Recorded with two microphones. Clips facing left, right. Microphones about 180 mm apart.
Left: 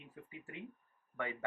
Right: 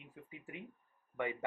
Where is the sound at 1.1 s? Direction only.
20° right (ahead or behind).